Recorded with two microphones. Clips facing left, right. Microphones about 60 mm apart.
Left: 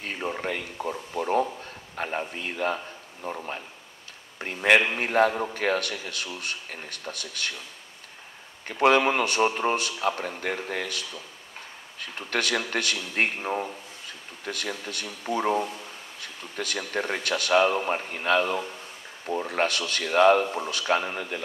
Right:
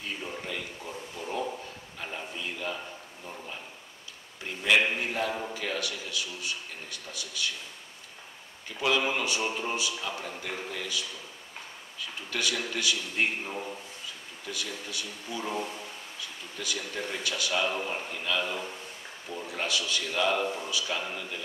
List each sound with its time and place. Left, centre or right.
0.0 s a man's voice: left
4.4 s a man's voice: left
8.6 s a man's voice: left